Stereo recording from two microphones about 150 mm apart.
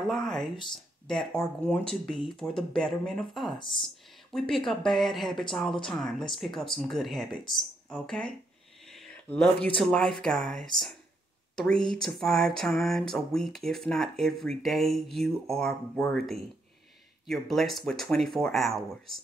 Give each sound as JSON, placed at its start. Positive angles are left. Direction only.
{"t": 0.0, "sound": "speech", "side_deg": 5}
{"t": 8.8, "sound": "a sound", "side_deg": 5}
{"t": 9.8, "sound": "speech", "side_deg": 0}
{"t": 11.7, "sound": "speech", "side_deg": -35}
{"t": 12.0, "sound": "speech", "side_deg": 5}